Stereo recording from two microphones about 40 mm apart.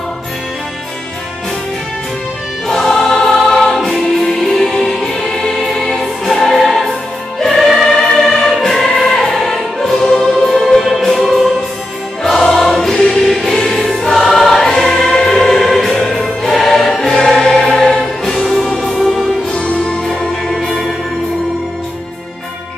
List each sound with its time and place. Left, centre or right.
2.7 s choir: centre
4.4 s music: centre
13.1 s choir: centre
17.4 s music: centre
19.5 s music: left
20.4 s music: centre